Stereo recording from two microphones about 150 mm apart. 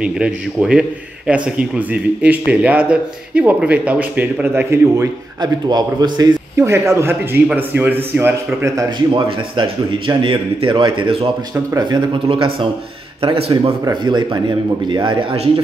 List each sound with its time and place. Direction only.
0.0 s a man's voice: 5° right (ahead or behind)
9.1 s a man's voice: 35° right (ahead or behind)
11.5 s speech: 20° right (ahead or behind)
12.1 s a man's voice: 35° right (ahead or behind)